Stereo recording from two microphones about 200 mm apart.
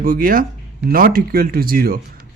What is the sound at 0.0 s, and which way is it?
Speech, 45° right (ahead or behind).